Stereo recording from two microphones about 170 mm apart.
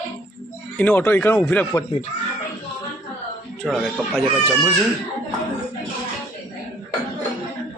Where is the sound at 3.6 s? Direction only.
Centre (ahead or behind).